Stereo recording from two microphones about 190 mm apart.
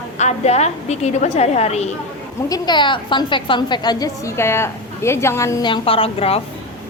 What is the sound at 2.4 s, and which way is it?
A woman's voice, 20° left (ahead or behind).